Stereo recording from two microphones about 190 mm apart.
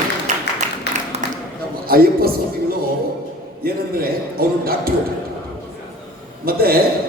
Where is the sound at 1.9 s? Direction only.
50° right (ahead or behind).